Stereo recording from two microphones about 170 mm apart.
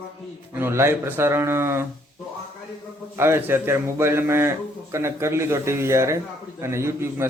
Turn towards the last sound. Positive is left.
turn(degrees=-15)  # may be behind; listen again after turning